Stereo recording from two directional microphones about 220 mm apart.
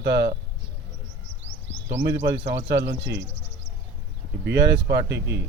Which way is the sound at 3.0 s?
55° right (ahead or behind).